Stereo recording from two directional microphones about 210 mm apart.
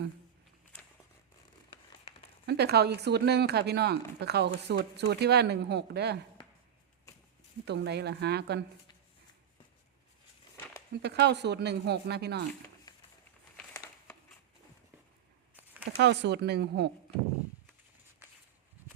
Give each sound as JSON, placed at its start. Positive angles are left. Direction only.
{"t": 2.5, "sound": "speech", "side_deg": -50}
{"t": 7.6, "sound": "speech", "side_deg": -55}
{"t": 11.0, "sound": "speech", "side_deg": -55}
{"t": 13.6, "sound": "a sound", "side_deg": 10}
{"t": 16.0, "sound": "speech", "side_deg": -55}